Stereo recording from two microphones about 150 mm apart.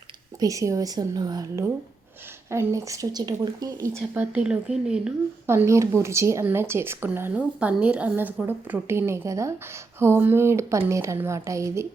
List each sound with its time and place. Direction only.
0.3 s speech: 20° right (ahead or behind); by 5.1 s 5° right (ahead or behind)
5.5 s speech: 20° right (ahead or behind)